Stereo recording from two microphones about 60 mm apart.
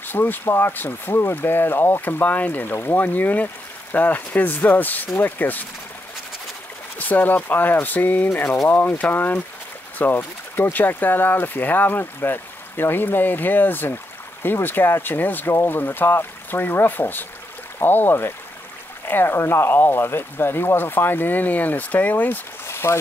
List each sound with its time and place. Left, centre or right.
0.0 s speech: left
2.7 s speech: left
7.0 s speech: left
22.7 s a sound: left